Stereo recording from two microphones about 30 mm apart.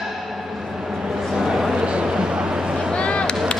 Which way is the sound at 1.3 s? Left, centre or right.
Centre.